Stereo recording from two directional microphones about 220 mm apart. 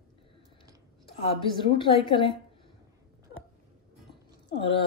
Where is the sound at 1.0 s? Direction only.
25° left (ahead or behind).